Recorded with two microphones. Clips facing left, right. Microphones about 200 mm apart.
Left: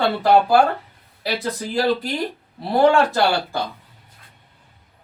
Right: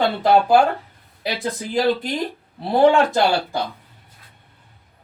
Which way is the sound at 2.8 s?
20° right (ahead or behind).